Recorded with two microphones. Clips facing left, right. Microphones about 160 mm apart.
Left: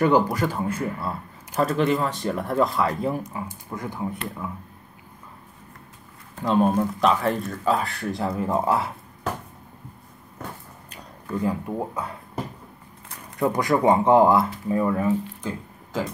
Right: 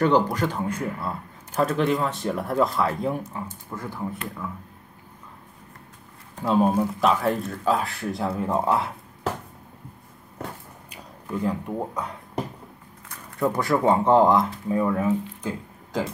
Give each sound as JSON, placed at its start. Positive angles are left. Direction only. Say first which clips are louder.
{"t": 0.0, "sound": "speech", "louder": "left 1 dB", "side_deg": 10}
{"t": 3.7, "sound": "speech", "louder": "left 2 dB", "side_deg": 15}
{"t": 6.3, "sound": "speech", "louder": "even", "side_deg": -5}
{"t": 11.4, "sound": "speech", "louder": "left 1 dB", "side_deg": 5}
{"t": 13.4, "sound": "speech", "louder": "left 1 dB", "side_deg": 15}